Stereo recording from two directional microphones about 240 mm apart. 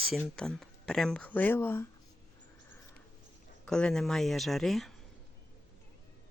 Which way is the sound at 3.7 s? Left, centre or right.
Centre.